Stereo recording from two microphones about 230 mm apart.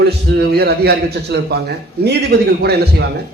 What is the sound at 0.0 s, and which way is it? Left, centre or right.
A man's voice, right.